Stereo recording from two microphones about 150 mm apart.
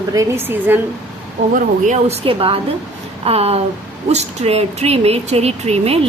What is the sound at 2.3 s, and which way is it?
A woman's voice, 35° right (ahead or behind).